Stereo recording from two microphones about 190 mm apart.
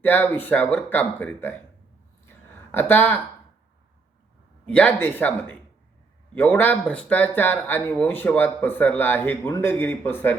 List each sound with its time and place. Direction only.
0.0 s speech: 10° left (ahead or behind)
2.7 s speech: 10° left (ahead or behind)
4.6 s speech: 5° left (ahead or behind)